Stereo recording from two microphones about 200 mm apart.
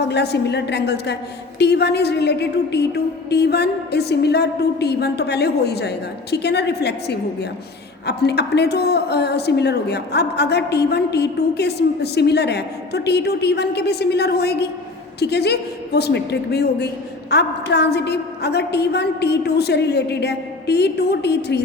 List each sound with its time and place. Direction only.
0.0 s a woman's voice: 55° left (ahead or behind)